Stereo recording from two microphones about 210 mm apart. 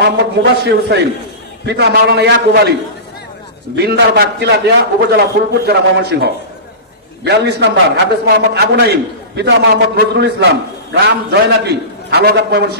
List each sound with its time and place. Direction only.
0.0 s a man's voice: 55° right (ahead or behind)
3.7 s a man's voice: 50° right (ahead or behind)